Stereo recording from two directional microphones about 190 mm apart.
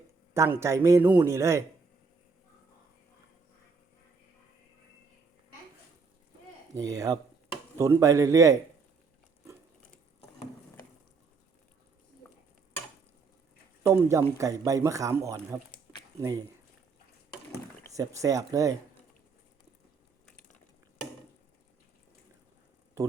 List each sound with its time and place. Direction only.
0.3 s a man's voice: 15° right (ahead or behind)
6.7 s a man's voice: 20° right (ahead or behind)
13.8 s a man's voice: 15° right (ahead or behind)
17.8 s a man's voice: 15° right (ahead or behind)